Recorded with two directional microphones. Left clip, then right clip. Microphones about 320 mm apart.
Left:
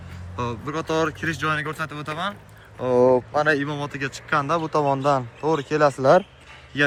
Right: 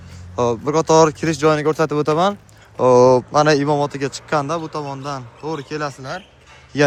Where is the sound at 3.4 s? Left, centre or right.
Centre.